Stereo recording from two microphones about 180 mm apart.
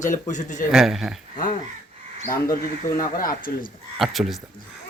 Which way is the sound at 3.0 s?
50° left (ahead or behind).